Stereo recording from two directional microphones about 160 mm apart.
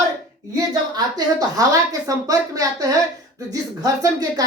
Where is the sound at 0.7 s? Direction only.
20° right (ahead or behind).